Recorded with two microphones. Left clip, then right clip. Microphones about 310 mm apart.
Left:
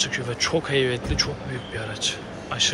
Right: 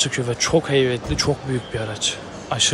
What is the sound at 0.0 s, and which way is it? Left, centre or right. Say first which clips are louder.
Speech: right 3 dB; centre.